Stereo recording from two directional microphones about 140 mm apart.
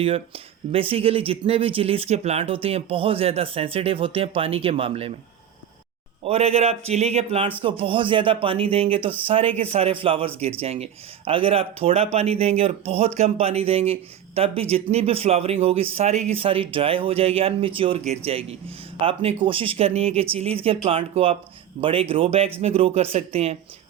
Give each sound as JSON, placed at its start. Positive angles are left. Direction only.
{"t": 0.0, "sound": "speech", "side_deg": -40}
{"t": 6.2, "sound": "speech", "side_deg": -45}
{"t": 19.0, "sound": "speech", "side_deg": -40}